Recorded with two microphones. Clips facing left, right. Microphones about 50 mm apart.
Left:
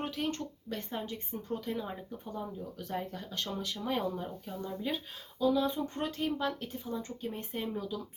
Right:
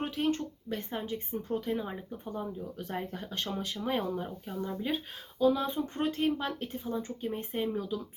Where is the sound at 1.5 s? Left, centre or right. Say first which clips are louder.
Right 3 dB; right.